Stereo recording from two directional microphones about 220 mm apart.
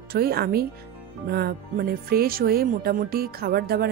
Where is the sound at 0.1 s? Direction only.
45° right (ahead or behind).